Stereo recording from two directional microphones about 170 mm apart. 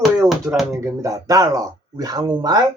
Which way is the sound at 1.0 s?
20° right (ahead or behind).